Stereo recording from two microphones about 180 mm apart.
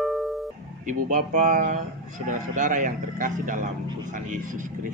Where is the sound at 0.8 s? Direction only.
45° right (ahead or behind).